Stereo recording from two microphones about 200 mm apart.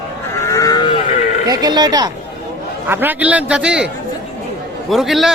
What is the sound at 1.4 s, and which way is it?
Speech, 20° right (ahead or behind).